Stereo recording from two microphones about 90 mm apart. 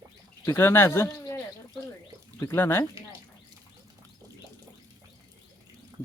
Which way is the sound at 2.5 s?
25° left (ahead or behind).